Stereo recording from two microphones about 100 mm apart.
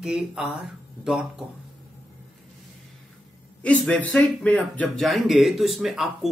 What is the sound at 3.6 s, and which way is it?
Speech, 15° left (ahead or behind).